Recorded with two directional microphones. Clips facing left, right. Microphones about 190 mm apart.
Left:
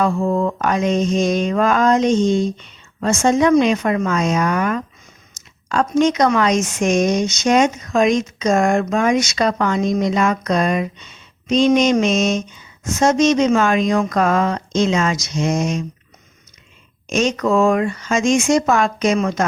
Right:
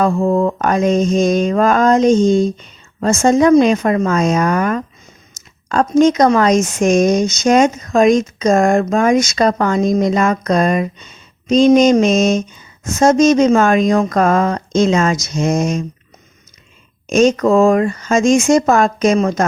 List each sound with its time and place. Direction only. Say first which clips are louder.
0.0 s speech: right 4 dB; 40° right (ahead or behind)
17.1 s speech: right 6 dB; 45° right (ahead or behind)